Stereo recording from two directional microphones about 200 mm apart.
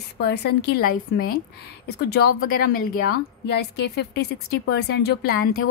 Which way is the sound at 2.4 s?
45° left (ahead or behind).